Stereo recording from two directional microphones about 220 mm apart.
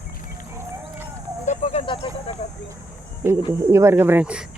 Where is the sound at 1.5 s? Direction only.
25° left (ahead or behind).